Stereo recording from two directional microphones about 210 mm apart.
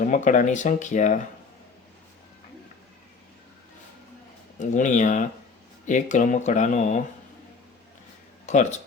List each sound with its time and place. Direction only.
0.0 s speech: 35° left (ahead or behind)
4.6 s speech: 35° left (ahead or behind)
8.4 s speech: 35° left (ahead or behind)